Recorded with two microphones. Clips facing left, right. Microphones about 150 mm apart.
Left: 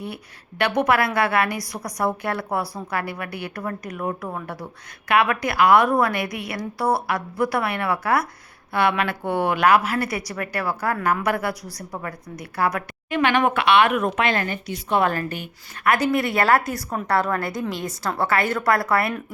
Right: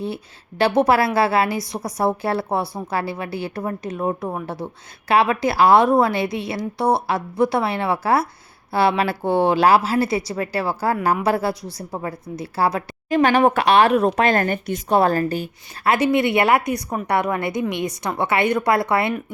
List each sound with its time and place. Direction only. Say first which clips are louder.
0.6 s a woman's voice: right 4 dB; 30° right (ahead or behind); by 14.9 s 50° right (ahead or behind)
14.9 s a woman's voice: right 4 dB; 35° right (ahead or behind)